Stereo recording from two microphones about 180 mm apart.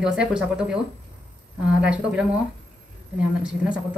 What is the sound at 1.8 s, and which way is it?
Speech, 5° right (ahead or behind).